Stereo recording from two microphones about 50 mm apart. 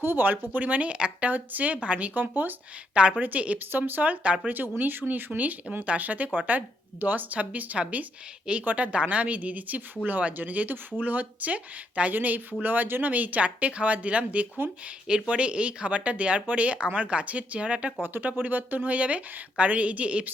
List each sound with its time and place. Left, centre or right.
0.0 s speech: right
2.9 s a woman's voice: right
3.7 s speech: right
4.8 s speech: right
14.6 s speech: right
15.0 s speech: right
18.0 s speech: right